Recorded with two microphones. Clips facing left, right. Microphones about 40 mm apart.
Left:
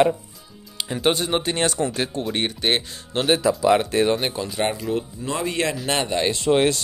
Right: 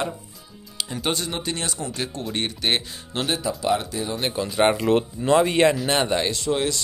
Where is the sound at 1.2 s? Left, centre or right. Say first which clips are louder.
Left 6 dB; left.